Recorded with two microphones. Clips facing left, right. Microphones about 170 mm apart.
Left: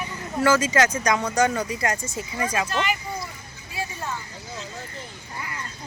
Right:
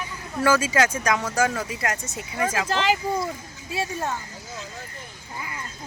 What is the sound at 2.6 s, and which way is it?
Speech, 90° right.